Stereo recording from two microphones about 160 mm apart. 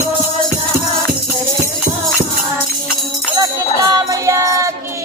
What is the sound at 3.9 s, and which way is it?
Music, 20° right (ahead or behind).